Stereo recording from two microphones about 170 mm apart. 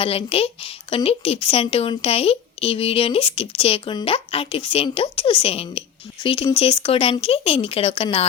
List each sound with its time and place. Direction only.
0.0 s speech: 35° left (ahead or behind)